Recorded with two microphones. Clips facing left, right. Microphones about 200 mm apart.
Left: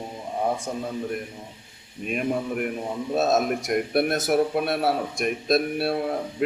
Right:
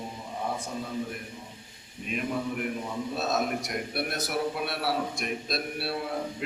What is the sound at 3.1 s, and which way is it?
A man's voice, 50° left (ahead or behind).